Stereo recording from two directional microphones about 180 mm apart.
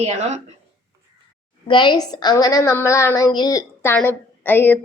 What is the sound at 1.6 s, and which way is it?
A woman's voice, 25° left (ahead or behind).